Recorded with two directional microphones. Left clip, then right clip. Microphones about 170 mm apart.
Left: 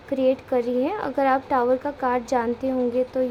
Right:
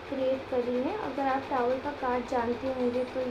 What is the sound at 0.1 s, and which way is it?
A woman's voice, 45° left (ahead or behind).